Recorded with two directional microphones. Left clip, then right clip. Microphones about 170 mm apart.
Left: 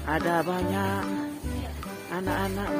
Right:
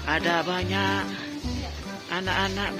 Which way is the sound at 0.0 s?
15° left (ahead or behind).